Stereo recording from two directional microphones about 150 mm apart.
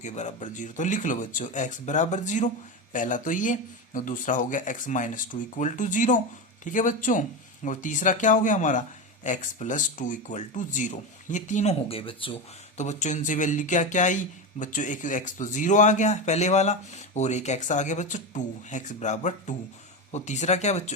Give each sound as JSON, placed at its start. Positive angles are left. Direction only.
{"t": 0.0, "sound": "speech", "side_deg": 50}
{"t": 12.7, "sound": "speech", "side_deg": 50}